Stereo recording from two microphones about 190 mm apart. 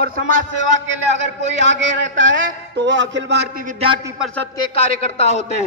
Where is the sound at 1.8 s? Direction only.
75° right (ahead or behind).